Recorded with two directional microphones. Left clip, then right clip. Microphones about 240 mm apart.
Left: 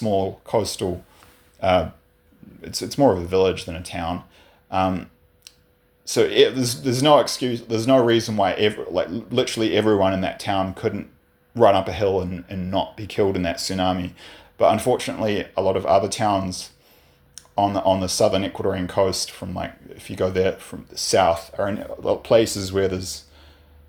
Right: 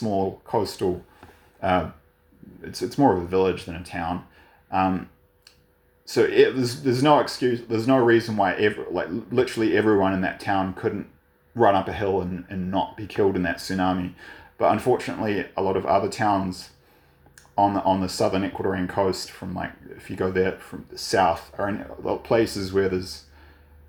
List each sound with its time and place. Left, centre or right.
0.0 s speech: left
2.6 s speech: left
6.1 s speech: left